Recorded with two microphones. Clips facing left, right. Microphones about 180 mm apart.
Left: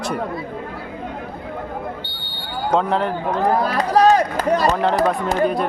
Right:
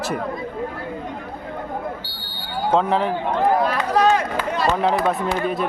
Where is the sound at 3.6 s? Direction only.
35° left (ahead or behind).